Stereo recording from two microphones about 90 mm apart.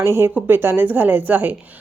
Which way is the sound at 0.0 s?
30° right (ahead or behind).